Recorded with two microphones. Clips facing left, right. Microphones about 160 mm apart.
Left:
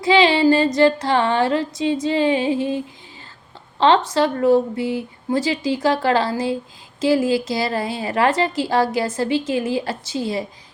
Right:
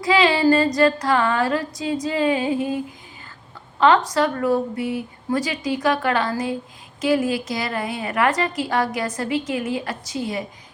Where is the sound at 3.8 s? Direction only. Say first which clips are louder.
Left 1 dB; 25° left (ahead or behind).